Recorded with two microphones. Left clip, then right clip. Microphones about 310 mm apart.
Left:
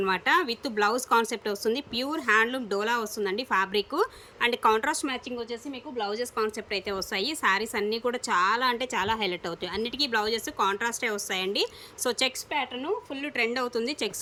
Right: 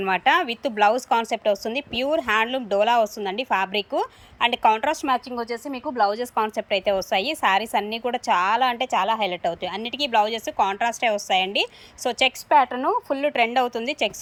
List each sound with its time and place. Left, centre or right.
0.0 s a woman's voice: centre
12.5 s a woman's voice: right
13.1 s a woman's voice: centre